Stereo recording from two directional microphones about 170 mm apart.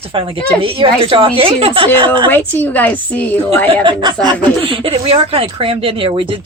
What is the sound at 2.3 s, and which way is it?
A woman's voice, 10° left (ahead or behind).